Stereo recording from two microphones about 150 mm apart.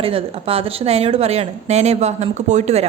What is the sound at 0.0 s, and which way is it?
A woman's voice, 40° right (ahead or behind).